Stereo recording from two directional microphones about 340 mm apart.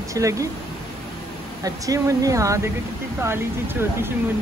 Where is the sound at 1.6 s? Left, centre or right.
Centre.